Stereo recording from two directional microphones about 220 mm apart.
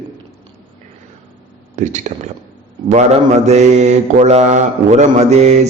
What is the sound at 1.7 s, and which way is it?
Speech, 35° right (ahead or behind).